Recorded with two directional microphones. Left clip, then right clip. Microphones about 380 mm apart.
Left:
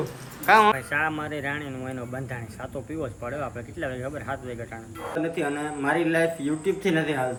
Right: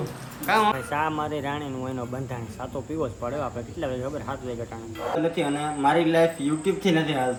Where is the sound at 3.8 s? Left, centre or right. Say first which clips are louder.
Right 1 dB; centre.